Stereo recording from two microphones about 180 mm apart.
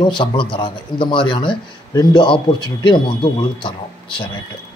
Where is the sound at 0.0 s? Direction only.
25° left (ahead or behind).